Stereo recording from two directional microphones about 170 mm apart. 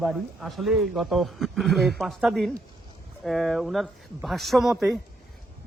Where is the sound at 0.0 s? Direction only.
Centre (ahead or behind).